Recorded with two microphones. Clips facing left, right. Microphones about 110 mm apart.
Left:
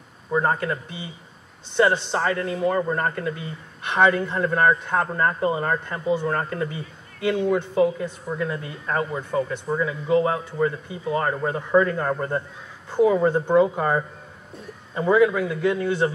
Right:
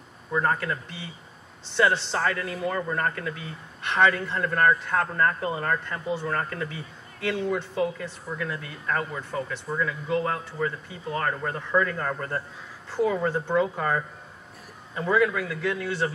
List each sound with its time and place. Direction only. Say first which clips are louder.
0.3 s a man's voice: left 3 dB; 15° left (ahead or behind)
2.7 s a man's voice: left 4 dB; 15° left (ahead or behind)